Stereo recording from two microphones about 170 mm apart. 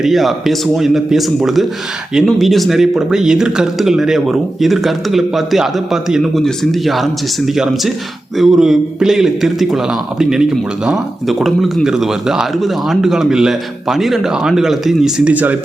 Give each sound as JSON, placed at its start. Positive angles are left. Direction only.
{"t": 0.0, "sound": "a man's voice", "side_deg": 0}